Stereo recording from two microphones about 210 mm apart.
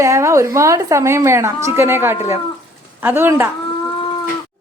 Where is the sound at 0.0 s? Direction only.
15° right (ahead or behind).